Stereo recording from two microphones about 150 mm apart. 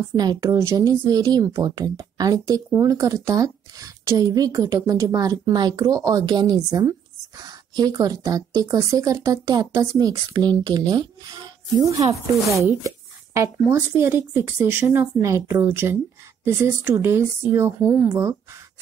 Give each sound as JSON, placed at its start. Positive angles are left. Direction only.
{"t": 0.1, "sound": "a woman's voice", "side_deg": -25}
{"t": 12.4, "sound": "speech", "side_deg": -20}